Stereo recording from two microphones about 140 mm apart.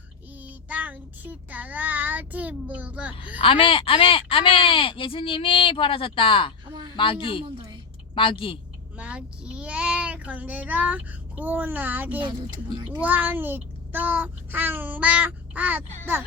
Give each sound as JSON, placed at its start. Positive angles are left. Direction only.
{"t": 0.4, "sound": "child singing", "side_deg": -10}
{"t": 3.3, "sound": "speech", "side_deg": 40}
{"t": 7.5, "sound": "a sound", "side_deg": -35}
{"t": 8.1, "sound": "speech", "side_deg": 40}
{"t": 9.0, "sound": "a child's voice", "side_deg": -10}